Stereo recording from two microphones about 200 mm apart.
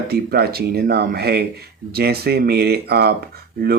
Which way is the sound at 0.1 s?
50° right (ahead or behind).